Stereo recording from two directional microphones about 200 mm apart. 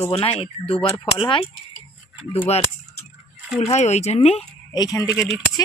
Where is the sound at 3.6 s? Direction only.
35° left (ahead or behind).